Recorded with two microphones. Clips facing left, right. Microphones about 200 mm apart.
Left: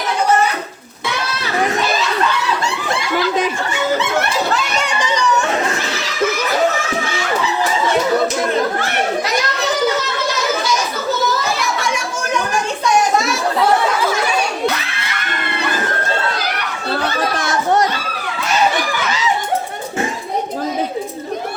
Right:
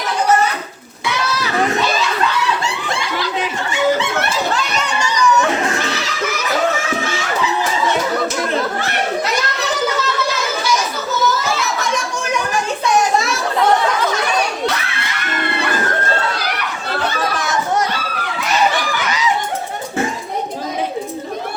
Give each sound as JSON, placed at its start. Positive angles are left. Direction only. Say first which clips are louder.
{"t": 4.9, "sound": "children playing", "louder": "right 2 dB", "side_deg": 20}